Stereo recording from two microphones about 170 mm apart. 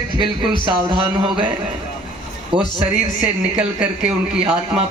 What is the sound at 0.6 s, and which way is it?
A man's voice, 30° right (ahead or behind).